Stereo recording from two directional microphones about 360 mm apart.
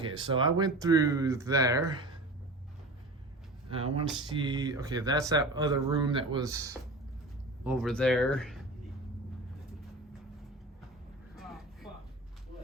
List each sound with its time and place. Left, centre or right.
0.2 s speech: centre
3.7 s speech: centre
11.3 s vehicle: centre